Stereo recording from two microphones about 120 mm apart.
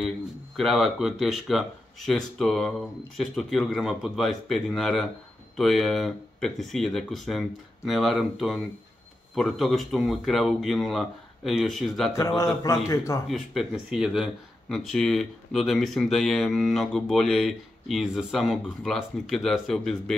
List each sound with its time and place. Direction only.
0.6 s speech: centre (ahead or behind)
12.1 s speech: 25° left (ahead or behind)
13.3 s speech: centre (ahead or behind)